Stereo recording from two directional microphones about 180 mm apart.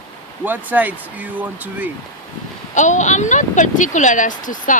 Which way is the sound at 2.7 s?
40° left (ahead or behind).